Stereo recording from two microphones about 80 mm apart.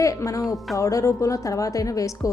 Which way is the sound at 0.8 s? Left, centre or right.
Left.